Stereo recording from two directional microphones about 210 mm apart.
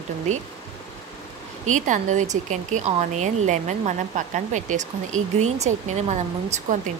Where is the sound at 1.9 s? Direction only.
35° right (ahead or behind).